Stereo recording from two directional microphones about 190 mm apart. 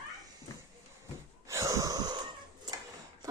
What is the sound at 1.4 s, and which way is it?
Wheeze, 15° right (ahead or behind).